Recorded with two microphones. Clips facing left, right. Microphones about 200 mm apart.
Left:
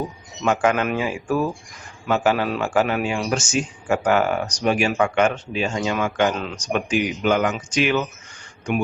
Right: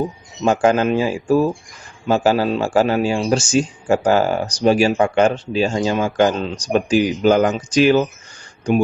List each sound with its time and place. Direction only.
0.4 s speech: 30° right (ahead or behind)